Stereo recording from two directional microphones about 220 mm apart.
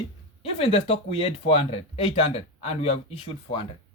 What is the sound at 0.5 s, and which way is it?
Speech, 25° left (ahead or behind).